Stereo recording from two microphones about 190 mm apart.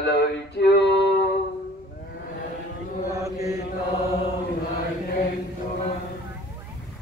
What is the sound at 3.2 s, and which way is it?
Mantra, 15° right (ahead or behind).